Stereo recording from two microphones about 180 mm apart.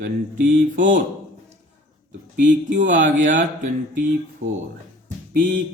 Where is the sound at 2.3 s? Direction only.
45° right (ahead or behind).